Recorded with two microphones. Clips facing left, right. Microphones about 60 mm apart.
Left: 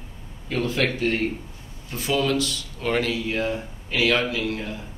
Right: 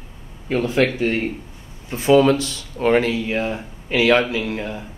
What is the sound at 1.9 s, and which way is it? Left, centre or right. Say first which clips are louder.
Speech: right 9 dB; right.